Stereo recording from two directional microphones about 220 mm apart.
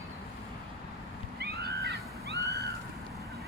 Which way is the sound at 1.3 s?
50° right (ahead or behind).